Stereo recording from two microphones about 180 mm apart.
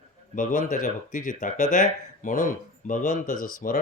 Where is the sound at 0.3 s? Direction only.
45° left (ahead or behind).